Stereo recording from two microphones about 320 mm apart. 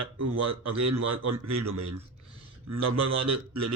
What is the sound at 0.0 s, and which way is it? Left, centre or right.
A man's voice, right.